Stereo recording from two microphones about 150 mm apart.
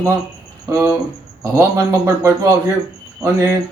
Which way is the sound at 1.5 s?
20° right (ahead or behind).